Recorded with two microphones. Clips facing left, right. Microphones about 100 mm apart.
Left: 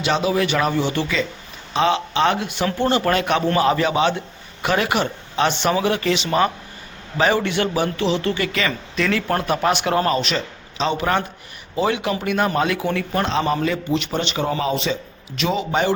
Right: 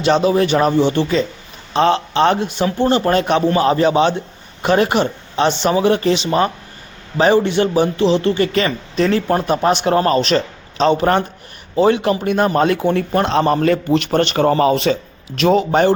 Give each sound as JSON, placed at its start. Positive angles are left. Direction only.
{"t": 0.3, "sound": "a man's voice", "side_deg": -35}
{"t": 2.6, "sound": "speech", "side_deg": -15}
{"t": 2.9, "sound": "a man's voice", "side_deg": -30}
{"t": 13.2, "sound": "a man's voice", "side_deg": -50}
{"t": 15.4, "sound": "a man's voice", "side_deg": -50}